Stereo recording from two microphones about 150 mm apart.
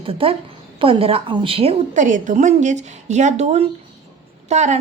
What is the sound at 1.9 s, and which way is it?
A woman's voice, 55° right (ahead or behind).